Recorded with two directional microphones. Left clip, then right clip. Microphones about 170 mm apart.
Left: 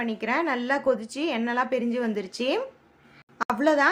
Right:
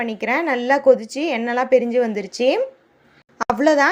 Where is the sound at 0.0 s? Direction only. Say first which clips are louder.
Right 5 dB; 25° right (ahead or behind).